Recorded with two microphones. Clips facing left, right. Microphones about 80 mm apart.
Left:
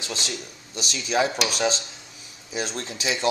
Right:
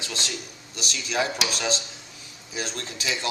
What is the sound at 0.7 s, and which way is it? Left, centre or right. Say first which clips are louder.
Speech: left 3 dB; left.